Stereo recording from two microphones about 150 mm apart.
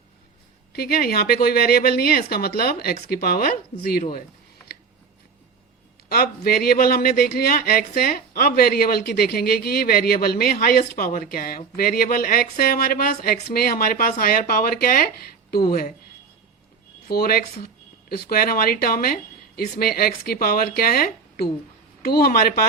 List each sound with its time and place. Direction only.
0.7 s speech: 90° left
6.1 s speech: 90° left
17.1 s speech: 90° left